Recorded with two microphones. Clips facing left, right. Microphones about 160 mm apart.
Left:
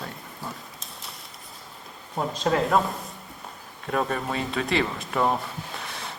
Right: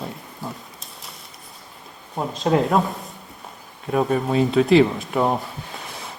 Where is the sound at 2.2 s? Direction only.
Centre (ahead or behind).